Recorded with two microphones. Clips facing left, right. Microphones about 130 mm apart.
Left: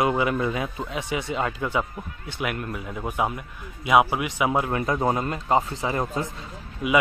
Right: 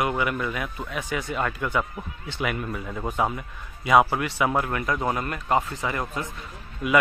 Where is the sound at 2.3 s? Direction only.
10° left (ahead or behind).